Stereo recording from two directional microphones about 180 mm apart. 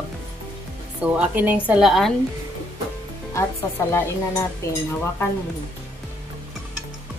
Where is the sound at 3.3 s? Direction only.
15° left (ahead or behind).